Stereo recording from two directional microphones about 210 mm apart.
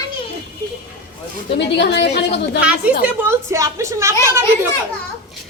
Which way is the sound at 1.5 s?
55° left (ahead or behind).